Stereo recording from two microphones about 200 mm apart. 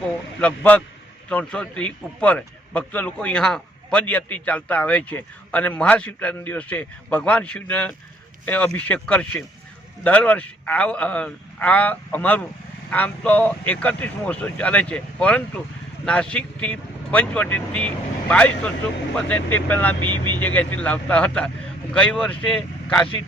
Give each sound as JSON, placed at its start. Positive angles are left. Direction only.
{"t": 0.3, "sound": "a man's voice", "side_deg": 5}